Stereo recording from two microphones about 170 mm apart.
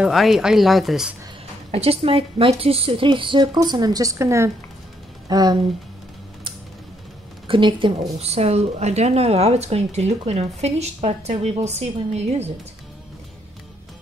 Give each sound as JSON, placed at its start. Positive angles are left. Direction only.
{"t": 0.0, "sound": "a woman's voice", "side_deg": 0}
{"t": 1.7, "sound": "a woman's voice", "side_deg": -35}
{"t": 7.4, "sound": "a woman's voice", "side_deg": -30}